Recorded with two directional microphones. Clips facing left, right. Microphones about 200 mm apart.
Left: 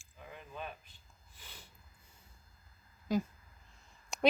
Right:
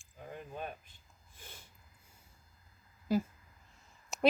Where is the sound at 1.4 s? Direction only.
50° right (ahead or behind).